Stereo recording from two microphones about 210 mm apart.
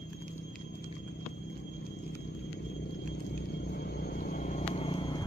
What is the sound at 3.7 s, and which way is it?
Vehicle, 50° left (ahead or behind).